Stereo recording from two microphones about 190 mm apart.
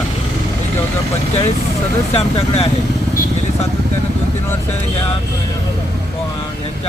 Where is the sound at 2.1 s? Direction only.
30° left (ahead or behind).